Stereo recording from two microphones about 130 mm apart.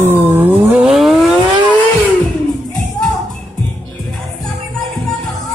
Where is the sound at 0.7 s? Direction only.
5° right (ahead or behind).